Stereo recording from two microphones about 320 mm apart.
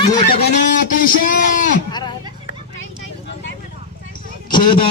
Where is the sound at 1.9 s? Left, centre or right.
Centre.